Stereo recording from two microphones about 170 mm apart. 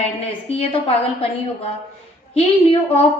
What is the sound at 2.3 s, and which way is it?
Speech, 35° left (ahead or behind).